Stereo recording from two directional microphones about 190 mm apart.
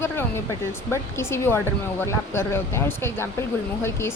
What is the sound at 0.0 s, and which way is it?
Speech, 10° left (ahead or behind).